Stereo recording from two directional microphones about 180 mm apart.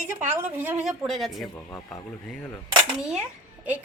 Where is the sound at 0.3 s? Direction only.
10° right (ahead or behind).